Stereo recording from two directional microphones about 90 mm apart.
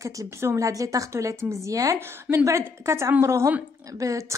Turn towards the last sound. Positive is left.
turn(degrees=-40)  # may be behind; listen again after turning